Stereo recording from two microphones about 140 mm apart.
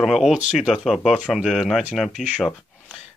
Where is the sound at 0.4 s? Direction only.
55° left (ahead or behind).